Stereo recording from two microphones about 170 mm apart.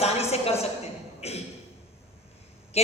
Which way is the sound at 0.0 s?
35° left (ahead or behind).